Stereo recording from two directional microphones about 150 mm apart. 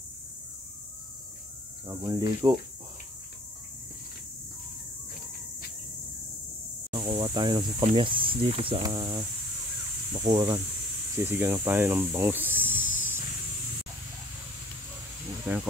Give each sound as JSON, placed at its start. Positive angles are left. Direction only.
{"t": 1.9, "sound": "speech", "side_deg": -25}
{"t": 6.9, "sound": "a sound", "side_deg": -30}
{"t": 7.9, "sound": "speech", "side_deg": -35}
{"t": 8.8, "sound": "speech", "side_deg": -25}
{"t": 11.1, "sound": "speech", "side_deg": -15}